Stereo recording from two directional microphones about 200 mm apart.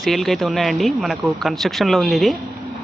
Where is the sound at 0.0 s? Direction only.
Centre (ahead or behind).